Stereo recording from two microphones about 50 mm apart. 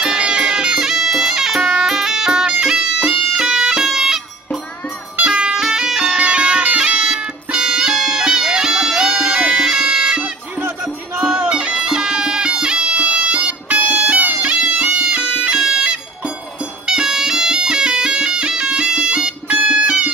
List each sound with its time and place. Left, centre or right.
0.0 s music: centre
5.2 s music: centre
5.6 s music: centre
11.3 s music: right
14.5 s bagpipes: right
16.8 s music: centre